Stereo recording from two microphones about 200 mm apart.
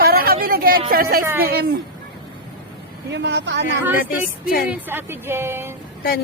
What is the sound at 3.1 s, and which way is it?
Speech, 60° right (ahead or behind).